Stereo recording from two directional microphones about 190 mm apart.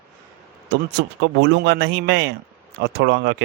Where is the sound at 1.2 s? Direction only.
60° right (ahead or behind).